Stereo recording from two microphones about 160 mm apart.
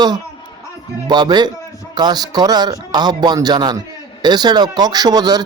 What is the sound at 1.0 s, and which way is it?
Speech, 25° right (ahead or behind).